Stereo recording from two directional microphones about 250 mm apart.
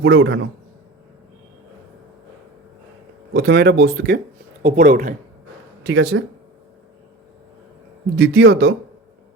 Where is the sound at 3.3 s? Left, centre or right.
Right.